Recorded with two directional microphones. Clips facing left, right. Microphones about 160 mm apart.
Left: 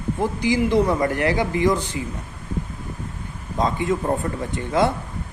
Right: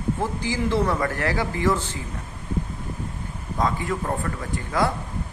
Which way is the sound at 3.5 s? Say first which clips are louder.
Left 3 dB; 20° left (ahead or behind).